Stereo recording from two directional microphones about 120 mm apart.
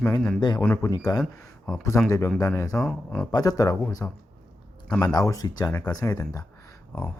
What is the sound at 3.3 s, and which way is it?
Speech, 30° left (ahead or behind).